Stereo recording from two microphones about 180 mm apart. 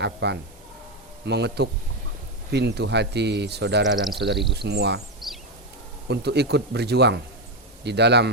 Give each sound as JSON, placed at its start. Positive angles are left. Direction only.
{"t": 0.0, "sound": "speech", "side_deg": -70}
{"t": 3.9, "sound": "speech", "side_deg": 0}
{"t": 4.5, "sound": "speech", "side_deg": -65}
{"t": 5.2, "sound": "a sound", "side_deg": 0}
{"t": 6.1, "sound": "speech", "side_deg": -65}